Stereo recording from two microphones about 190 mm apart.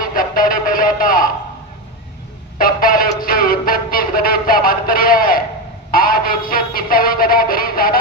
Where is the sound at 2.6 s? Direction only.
50° left (ahead or behind).